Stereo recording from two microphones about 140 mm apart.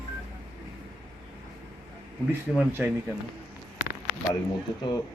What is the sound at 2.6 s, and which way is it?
Speech, 15° right (ahead or behind).